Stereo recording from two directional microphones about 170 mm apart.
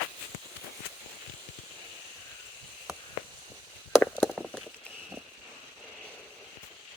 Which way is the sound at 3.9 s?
10° left (ahead or behind).